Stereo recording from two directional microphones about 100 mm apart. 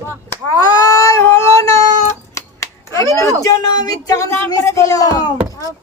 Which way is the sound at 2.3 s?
30° left (ahead or behind).